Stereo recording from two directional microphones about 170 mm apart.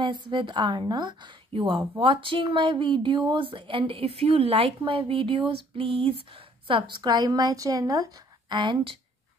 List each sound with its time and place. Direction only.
0.0 s a woman's voice: 30° right (ahead or behind)